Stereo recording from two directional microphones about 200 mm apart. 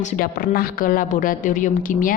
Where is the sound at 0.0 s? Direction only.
40° left (ahead or behind).